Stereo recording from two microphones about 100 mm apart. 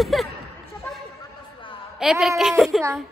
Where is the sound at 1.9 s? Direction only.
5° right (ahead or behind).